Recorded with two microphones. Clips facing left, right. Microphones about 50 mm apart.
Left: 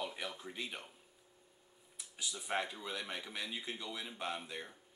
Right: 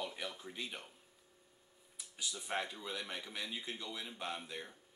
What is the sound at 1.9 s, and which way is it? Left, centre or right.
Speech, centre.